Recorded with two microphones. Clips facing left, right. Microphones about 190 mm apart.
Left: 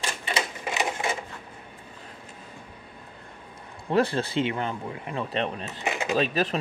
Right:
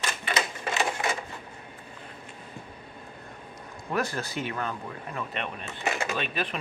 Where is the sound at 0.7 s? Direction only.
15° left (ahead or behind).